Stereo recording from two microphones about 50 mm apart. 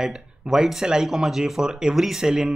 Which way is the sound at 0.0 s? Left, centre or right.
Centre.